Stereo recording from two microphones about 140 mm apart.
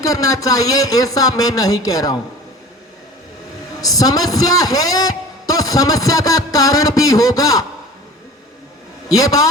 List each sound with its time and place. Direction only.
0.0 s a man's voice: 25° left (ahead or behind)
3.8 s a man's voice: 25° left (ahead or behind)
9.1 s a man's voice: 25° left (ahead or behind)